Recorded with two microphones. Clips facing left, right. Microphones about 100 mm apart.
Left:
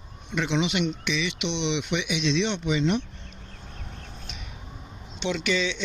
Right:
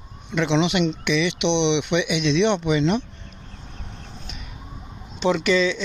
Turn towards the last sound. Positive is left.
turn(degrees=-40)  # may be behind; listen again after turning